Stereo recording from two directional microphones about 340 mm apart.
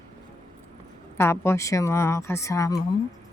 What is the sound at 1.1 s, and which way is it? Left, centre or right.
A woman's voice, centre.